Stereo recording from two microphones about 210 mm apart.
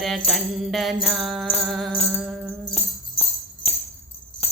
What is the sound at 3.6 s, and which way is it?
Music, 30° left (ahead or behind).